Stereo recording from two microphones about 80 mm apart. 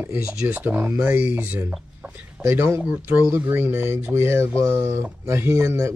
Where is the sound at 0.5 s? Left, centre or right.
Right.